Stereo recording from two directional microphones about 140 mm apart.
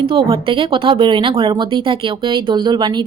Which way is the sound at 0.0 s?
40° right (ahead or behind).